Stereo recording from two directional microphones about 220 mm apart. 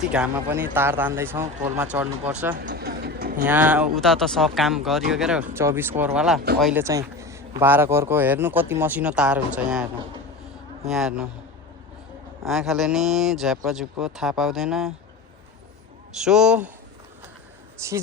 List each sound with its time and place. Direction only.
0.1 s a man's voice: 5° right (ahead or behind)
2.6 s vehicle: 45° right (ahead or behind)
3.4 s speech: 10° right (ahead or behind)
6.8 s a man's voice: 15° right (ahead or behind)
10.8 s speech: centre (ahead or behind)
12.5 s speech: centre (ahead or behind)
16.1 s speech: centre (ahead or behind)
17.7 s speech: 15° right (ahead or behind)